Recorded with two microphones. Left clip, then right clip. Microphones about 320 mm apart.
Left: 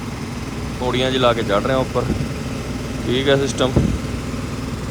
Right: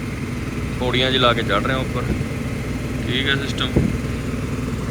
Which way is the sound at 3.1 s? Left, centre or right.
Centre.